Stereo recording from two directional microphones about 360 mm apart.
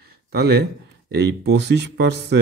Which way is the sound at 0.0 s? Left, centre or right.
Right.